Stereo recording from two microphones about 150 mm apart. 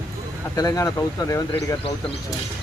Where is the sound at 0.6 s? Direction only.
25° left (ahead or behind).